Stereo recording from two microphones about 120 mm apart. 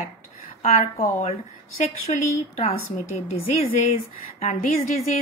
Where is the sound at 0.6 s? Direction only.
65° left (ahead or behind).